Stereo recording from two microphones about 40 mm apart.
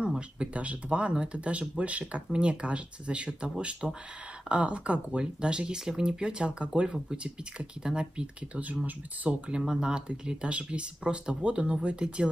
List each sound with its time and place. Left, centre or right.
0.0 s speech: right
8.8 s speech: right
9.6 s speech: centre